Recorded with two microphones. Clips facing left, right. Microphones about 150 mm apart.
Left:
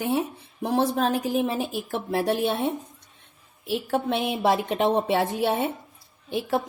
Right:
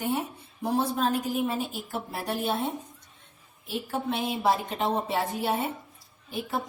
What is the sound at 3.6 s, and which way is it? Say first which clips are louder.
A woman's voice: left 5 dB; 80° left.